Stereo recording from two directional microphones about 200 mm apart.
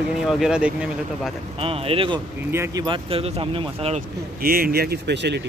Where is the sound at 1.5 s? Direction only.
30° right (ahead or behind).